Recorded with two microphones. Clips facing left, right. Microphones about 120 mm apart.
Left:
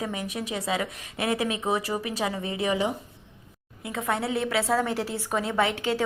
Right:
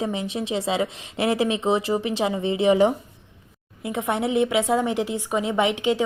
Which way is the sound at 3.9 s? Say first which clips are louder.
Right 4 dB; 25° right (ahead or behind).